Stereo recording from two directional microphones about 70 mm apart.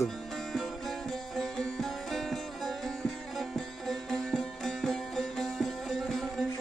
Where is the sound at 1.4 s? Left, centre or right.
Centre.